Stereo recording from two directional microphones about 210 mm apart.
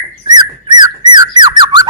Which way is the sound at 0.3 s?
20° right (ahead or behind).